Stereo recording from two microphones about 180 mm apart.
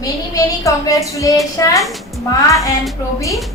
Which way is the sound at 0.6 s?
20° left (ahead or behind).